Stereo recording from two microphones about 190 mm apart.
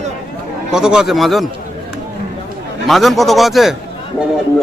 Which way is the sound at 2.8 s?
Centre (ahead or behind).